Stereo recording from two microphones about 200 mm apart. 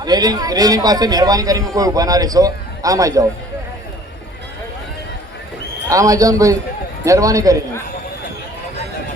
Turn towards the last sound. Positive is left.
turn(degrees=-15)  # may be behind; listen again after turning